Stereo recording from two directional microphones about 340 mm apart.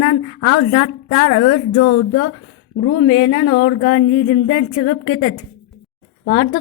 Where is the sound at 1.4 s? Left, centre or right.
Left.